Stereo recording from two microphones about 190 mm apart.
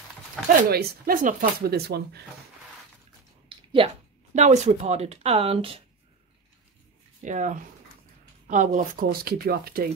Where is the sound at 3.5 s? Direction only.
25° right (ahead or behind).